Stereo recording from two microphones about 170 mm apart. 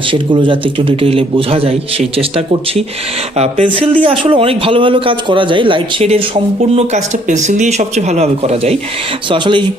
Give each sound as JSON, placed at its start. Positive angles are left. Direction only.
{"t": 0.1, "sound": "a man's voice", "side_deg": -30}
{"t": 9.3, "sound": "speech", "side_deg": -30}